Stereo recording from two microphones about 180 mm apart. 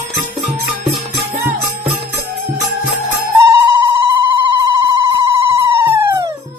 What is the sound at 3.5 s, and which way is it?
Ringtone, 15° right (ahead or behind).